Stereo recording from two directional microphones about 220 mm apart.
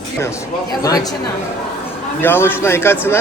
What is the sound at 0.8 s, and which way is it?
Speech, 15° left (ahead or behind).